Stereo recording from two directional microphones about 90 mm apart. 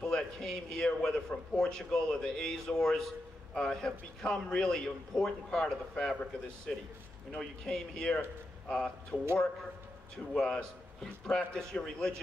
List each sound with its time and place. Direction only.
0.0 s a man's voice: 5° left (ahead or behind)
7.3 s a man's voice: 5° left (ahead or behind)
10.3 s a man's voice: 10° left (ahead or behind)